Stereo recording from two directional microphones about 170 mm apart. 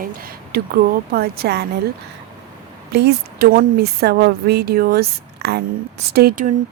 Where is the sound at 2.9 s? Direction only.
70° right (ahead or behind).